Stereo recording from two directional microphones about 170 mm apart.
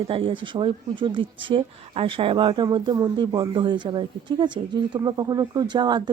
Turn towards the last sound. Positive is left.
turn(degrees=-25)  # may be behind; listen again after turning